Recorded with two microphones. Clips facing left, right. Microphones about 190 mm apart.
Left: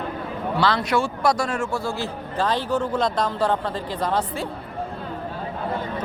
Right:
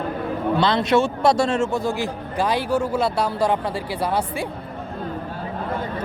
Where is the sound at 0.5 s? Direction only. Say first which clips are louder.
Right 3 dB; 20° right (ahead or behind).